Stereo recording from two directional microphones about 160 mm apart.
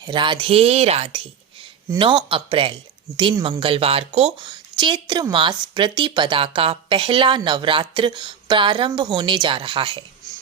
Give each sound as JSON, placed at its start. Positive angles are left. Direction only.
{"t": 0.0, "sound": "a woman's voice", "side_deg": -30}